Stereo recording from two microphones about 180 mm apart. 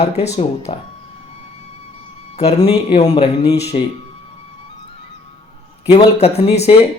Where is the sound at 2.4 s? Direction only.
35° left (ahead or behind).